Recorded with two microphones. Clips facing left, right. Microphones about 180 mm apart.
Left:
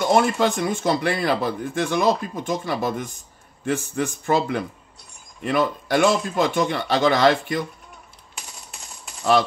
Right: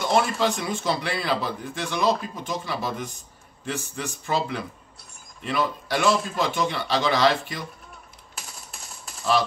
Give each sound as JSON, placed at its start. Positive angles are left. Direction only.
{"t": 0.0, "sound": "speech", "side_deg": 50}